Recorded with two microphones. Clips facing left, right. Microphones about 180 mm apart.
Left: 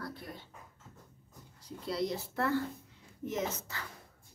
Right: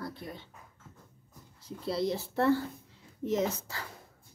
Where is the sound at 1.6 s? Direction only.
30° right (ahead or behind).